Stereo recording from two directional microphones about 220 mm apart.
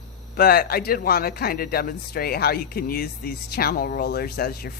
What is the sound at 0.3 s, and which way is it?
Speech, 45° left (ahead or behind).